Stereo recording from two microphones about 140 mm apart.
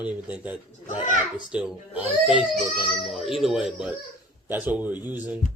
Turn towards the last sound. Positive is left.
turn(degrees=-10)  # may be behind; listen again after turning